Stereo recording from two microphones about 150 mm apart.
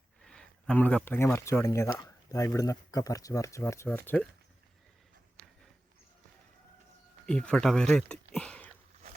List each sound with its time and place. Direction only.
0.2 s speech: 5° left (ahead or behind)
7.3 s speech: 5° left (ahead or behind)